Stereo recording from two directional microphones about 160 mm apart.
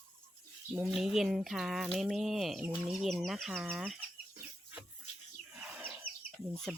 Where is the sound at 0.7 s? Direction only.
Centre (ahead or behind).